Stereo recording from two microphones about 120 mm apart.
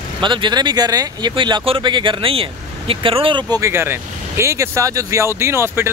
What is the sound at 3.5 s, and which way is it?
Speech, 25° right (ahead or behind).